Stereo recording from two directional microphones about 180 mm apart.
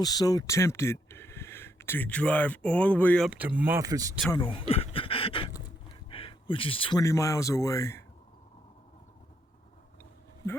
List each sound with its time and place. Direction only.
0.0 s speech: 20° left (ahead or behind)
3.2 s speech: 10° right (ahead or behind)
4.4 s speech: 30° left (ahead or behind)
4.7 s a sound: 30° left (ahead or behind)
7.0 s speech: 15° left (ahead or behind)
10.0 s a sound: 15° left (ahead or behind)